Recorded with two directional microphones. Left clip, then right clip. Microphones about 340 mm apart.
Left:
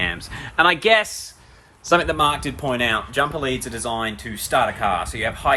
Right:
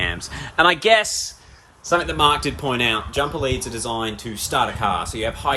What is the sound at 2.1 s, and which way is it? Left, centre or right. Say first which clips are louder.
Speech: right 2 dB; centre.